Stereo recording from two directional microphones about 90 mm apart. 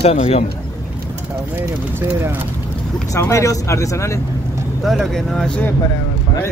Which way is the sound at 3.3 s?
35° left (ahead or behind).